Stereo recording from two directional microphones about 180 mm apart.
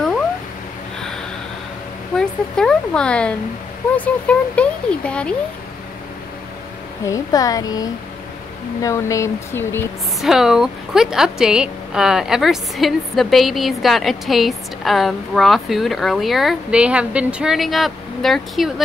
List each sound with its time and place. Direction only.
2.1 s a woman's voice: 5° left (ahead or behind)
7.1 s speech: 20° left (ahead or behind)
10.2 s a woman's voice: centre (ahead or behind)